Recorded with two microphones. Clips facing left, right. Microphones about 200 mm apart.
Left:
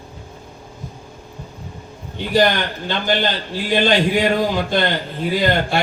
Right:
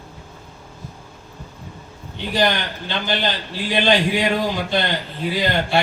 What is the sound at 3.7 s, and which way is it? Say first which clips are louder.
A man's voice: left 2 dB; 50° left (ahead or behind).